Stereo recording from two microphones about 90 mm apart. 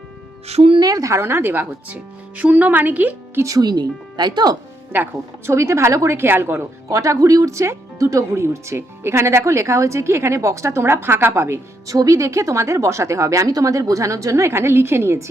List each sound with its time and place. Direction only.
0.8 s speech: 45° right (ahead or behind); by 3.4 s 20° right (ahead or behind)
3.4 s speech: 45° right (ahead or behind)
4.9 s a woman's voice: 20° right (ahead or behind)